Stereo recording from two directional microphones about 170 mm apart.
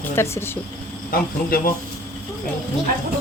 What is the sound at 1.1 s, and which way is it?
Speech, 55° left (ahead or behind).